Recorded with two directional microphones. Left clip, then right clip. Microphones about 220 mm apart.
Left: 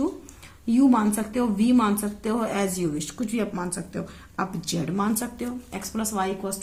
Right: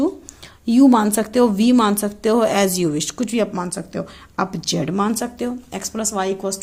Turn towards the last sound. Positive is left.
turn(degrees=-35)  # may be behind; listen again after turning